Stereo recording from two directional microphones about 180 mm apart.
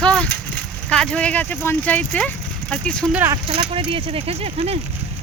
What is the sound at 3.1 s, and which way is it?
Speech, 10° right (ahead or behind).